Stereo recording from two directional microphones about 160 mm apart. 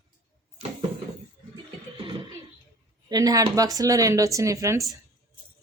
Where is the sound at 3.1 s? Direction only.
25° right (ahead or behind).